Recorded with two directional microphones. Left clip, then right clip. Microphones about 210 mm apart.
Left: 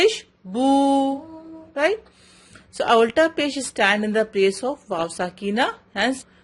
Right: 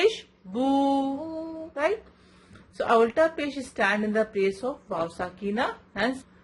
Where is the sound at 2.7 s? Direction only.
40° left (ahead or behind).